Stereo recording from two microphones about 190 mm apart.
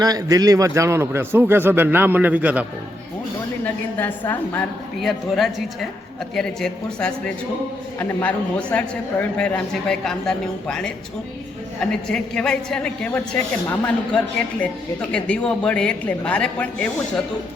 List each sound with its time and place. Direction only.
0.0 s a man's voice: 20° right (ahead or behind)
3.6 s a woman's voice: 10° left (ahead or behind)